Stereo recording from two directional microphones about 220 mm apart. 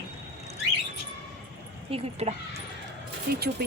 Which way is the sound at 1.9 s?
25° right (ahead or behind).